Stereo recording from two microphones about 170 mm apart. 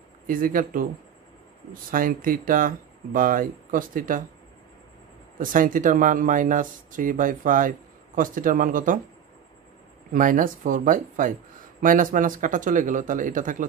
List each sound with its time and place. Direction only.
0.3 s speech: 55° right (ahead or behind)
5.4 s speech: 55° right (ahead or behind)
10.1 s speech: 50° right (ahead or behind)